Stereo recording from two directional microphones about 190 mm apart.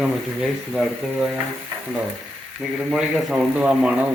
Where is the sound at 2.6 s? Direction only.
Centre (ahead or behind).